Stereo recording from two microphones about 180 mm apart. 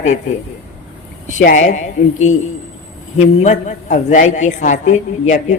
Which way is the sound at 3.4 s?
40° left (ahead or behind).